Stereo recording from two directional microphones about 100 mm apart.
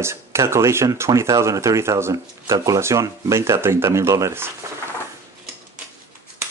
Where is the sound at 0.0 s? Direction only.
25° right (ahead or behind).